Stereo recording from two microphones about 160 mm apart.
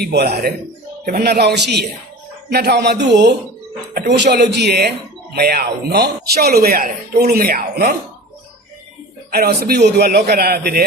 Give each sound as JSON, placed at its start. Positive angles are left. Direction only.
{"t": 0.0, "sound": "a man's voice", "side_deg": -90}
{"t": 1.0, "sound": "a man's voice", "side_deg": -75}
{"t": 9.3, "sound": "a man's voice", "side_deg": -75}